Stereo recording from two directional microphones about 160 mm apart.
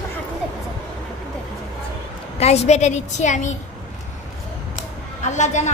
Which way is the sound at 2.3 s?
40° left (ahead or behind).